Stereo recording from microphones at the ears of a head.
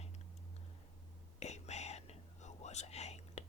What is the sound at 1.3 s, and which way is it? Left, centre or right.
Whispering, left.